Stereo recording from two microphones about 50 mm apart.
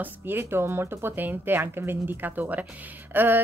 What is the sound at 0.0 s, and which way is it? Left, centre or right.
A woman's voice, right.